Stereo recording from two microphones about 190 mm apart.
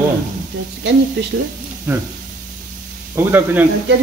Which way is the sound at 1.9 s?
10° right (ahead or behind).